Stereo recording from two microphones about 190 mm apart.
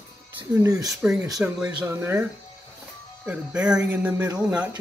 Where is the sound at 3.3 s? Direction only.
5° right (ahead or behind).